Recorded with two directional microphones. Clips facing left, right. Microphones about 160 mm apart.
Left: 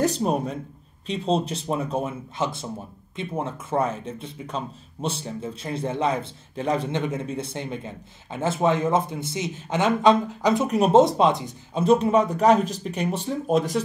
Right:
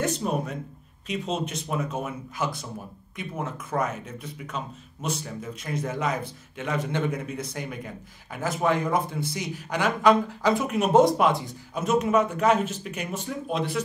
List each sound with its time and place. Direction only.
0.0 s speech: 35° left (ahead or behind)
6.9 s speech: 20° left (ahead or behind)
11.8 s speech: 30° left (ahead or behind)